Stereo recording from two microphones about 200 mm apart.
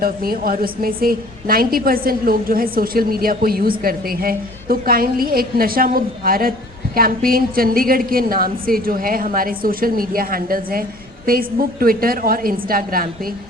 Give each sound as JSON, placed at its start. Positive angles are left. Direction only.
{"t": 0.0, "sound": "a woman's voice", "side_deg": -45}